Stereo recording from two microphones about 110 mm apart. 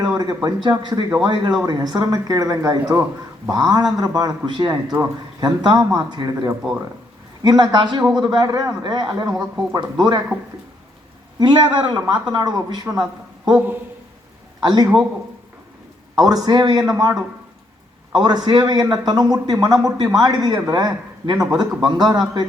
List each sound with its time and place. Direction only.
0.4 s a man's voice: 40° right (ahead or behind)
11.3 s a man's voice: 40° right (ahead or behind)
13.6 s a man's voice: 15° right (ahead or behind)
14.6 s a man's voice: 40° right (ahead or behind)
16.1 s a man's voice: 35° right (ahead or behind)